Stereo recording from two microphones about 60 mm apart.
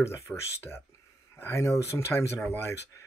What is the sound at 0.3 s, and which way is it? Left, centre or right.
Speech, left.